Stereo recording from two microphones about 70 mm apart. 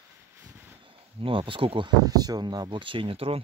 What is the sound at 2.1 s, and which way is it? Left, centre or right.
Speech, right.